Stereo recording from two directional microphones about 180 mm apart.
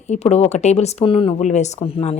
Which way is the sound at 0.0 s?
35° left (ahead or behind).